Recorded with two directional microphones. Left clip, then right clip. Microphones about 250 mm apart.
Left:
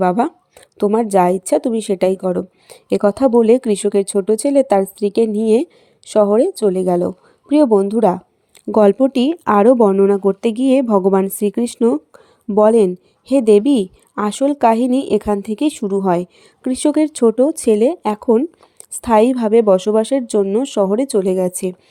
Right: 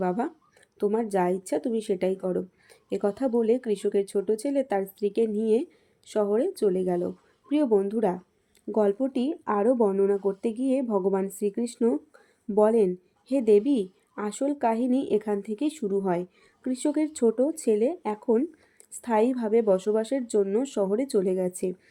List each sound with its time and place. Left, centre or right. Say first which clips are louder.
0.0 s speech: left 13 dB; left